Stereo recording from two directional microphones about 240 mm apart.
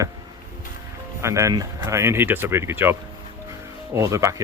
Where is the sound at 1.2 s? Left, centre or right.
Centre.